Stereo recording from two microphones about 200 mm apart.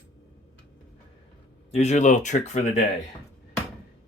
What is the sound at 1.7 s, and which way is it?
Speech, 35° left (ahead or behind).